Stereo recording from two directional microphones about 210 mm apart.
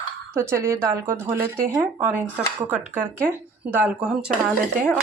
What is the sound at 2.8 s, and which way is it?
Speech, 35° right (ahead or behind).